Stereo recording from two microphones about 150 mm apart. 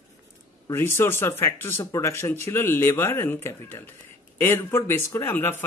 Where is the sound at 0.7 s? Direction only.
15° left (ahead or behind).